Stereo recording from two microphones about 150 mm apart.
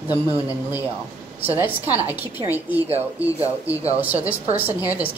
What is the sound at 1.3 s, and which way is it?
A woman's voice, 10° right (ahead or behind).